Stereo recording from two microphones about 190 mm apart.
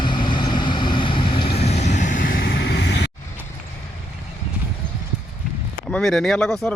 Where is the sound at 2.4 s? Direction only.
60° left (ahead or behind).